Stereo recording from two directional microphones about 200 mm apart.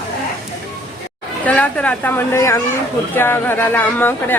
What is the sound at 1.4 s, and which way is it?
Speech, 5° left (ahead or behind).